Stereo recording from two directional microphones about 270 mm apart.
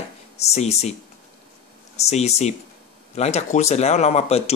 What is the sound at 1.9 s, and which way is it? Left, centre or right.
Speech, left.